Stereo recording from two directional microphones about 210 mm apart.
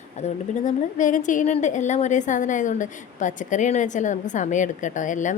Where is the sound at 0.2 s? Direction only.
35° left (ahead or behind).